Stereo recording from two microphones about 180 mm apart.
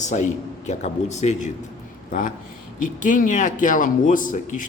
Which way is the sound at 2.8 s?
45° left (ahead or behind).